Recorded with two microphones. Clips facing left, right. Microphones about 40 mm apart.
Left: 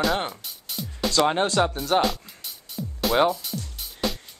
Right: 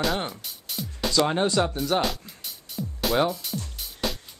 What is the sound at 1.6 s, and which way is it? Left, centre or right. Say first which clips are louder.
Speech: left 3 dB; centre.